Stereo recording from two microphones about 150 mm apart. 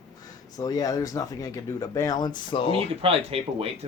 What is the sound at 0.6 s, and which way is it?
Speech, 25° left (ahead or behind).